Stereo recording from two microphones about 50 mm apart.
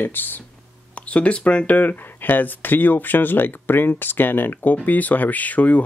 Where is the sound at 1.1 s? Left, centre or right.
Left.